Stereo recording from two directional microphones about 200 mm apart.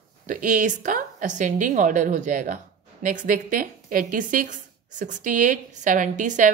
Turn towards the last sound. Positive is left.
turn(degrees=-40)  # may be behind; listen again after turning